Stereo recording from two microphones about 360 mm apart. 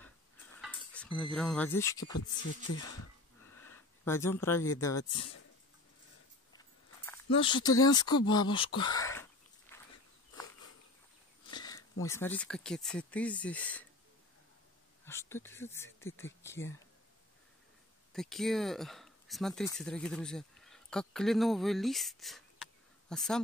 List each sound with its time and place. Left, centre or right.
0.6 s cutlery: centre
2.7 s speech: left
3.6 s speech: centre
4.9 s speech: left
7.1 s speech: centre
8.2 s a sound: centre
11.5 s speech: centre
15.0 s speech: centre
18.1 s speech: centre